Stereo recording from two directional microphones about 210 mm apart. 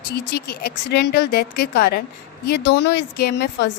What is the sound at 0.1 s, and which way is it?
Speech, 50° left (ahead or behind).